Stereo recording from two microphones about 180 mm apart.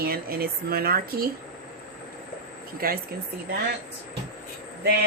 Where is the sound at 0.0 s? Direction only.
55° right (ahead or behind).